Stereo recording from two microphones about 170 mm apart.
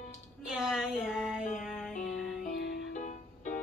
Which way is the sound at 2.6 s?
75° left (ahead or behind).